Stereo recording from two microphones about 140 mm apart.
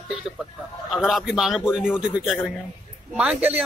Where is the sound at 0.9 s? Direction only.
Centre (ahead or behind).